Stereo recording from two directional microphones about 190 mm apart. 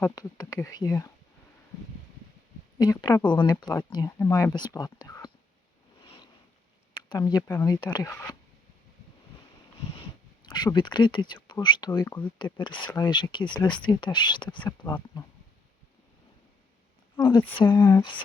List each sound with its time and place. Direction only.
0.0 s speech: 20° left (ahead or behind)
2.7 s speech: 20° left (ahead or behind)
6.9 s speech: 20° left (ahead or behind)
10.4 s speech: 20° left (ahead or behind)
17.2 s speech: 25° left (ahead or behind)